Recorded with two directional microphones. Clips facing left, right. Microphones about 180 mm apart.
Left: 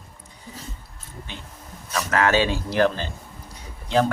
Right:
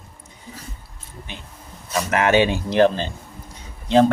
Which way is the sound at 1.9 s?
20° right (ahead or behind).